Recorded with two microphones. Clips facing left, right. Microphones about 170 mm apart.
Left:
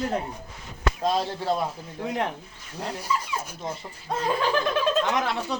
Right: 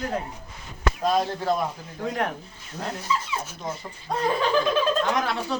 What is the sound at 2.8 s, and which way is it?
Speech, 10° left (ahead or behind).